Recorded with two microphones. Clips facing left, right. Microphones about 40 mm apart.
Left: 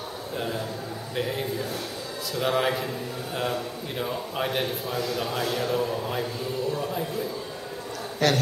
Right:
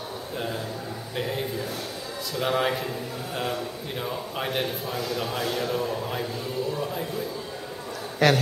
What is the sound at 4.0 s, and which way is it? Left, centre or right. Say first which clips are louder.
Speech: left 2 dB; centre.